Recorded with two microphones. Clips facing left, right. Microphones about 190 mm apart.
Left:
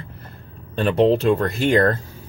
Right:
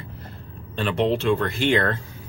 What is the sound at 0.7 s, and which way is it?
Speech, 40° left (ahead or behind).